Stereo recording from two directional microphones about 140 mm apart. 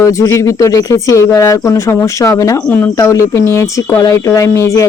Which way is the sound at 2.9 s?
25° left (ahead or behind).